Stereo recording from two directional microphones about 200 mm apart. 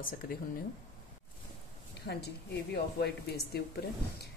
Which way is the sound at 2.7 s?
55° left (ahead or behind).